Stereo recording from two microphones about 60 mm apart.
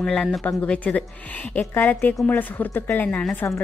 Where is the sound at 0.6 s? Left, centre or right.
Left.